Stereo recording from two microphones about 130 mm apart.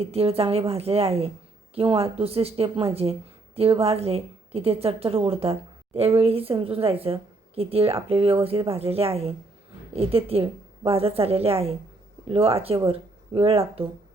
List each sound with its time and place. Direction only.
0.0 s speech: 50° right (ahead or behind)